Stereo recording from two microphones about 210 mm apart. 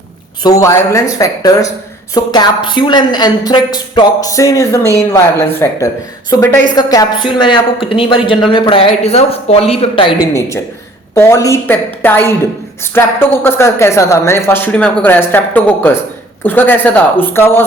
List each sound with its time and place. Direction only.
0.4 s a woman's voice: 15° left (ahead or behind)
11.1 s a woman's voice: 15° left (ahead or behind)